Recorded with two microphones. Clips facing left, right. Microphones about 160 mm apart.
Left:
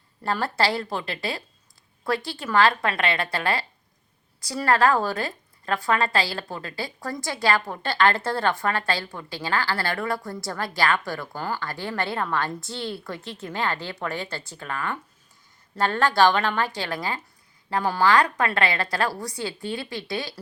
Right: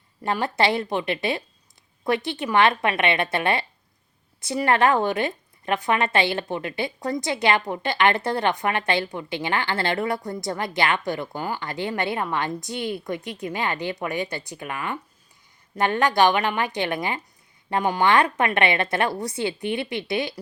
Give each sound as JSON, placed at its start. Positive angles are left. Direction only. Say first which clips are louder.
{"t": 0.2, "sound": "a woman's voice", "louder": "right 2 dB", "side_deg": -15}